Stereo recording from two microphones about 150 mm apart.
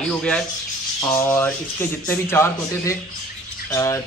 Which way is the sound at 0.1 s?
5° left (ahead or behind).